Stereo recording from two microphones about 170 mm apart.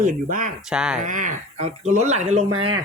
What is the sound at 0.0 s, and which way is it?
Speech, 55° right (ahead or behind).